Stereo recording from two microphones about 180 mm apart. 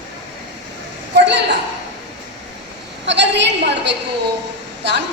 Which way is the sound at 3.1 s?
70° right (ahead or behind).